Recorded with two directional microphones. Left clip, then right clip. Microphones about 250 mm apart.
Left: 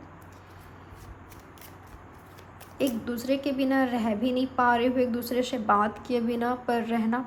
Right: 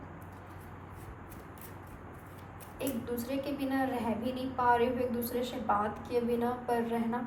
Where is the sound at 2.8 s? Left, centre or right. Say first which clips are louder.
Left 7 dB; left.